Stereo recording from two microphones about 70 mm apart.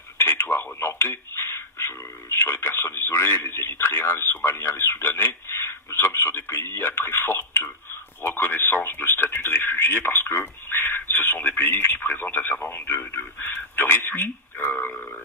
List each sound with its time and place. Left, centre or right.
0.2 s a man's voice: left